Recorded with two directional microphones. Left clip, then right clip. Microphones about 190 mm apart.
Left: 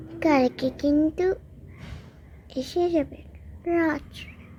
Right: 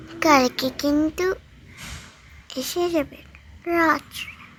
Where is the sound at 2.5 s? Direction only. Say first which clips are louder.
Right 1 dB; 5° right (ahead or behind).